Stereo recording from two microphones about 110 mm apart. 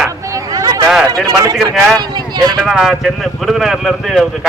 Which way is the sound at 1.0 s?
35° right (ahead or behind).